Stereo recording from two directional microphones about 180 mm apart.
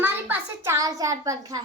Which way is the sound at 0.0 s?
15° right (ahead or behind).